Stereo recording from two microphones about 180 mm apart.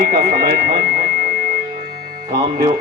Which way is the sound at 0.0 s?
55° right (ahead or behind).